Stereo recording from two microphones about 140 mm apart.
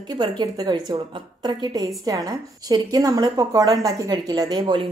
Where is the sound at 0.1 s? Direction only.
30° right (ahead or behind).